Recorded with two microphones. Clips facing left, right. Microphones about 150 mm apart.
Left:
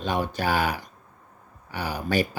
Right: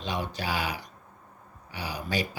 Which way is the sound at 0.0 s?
50° left (ahead or behind).